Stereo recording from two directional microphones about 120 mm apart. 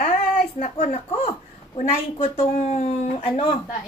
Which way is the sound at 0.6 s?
55° left (ahead or behind).